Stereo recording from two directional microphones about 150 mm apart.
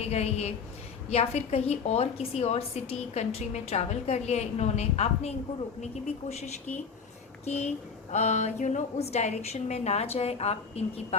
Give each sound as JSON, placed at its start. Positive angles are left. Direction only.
{"t": 0.0, "sound": "a woman's voice", "side_deg": 45}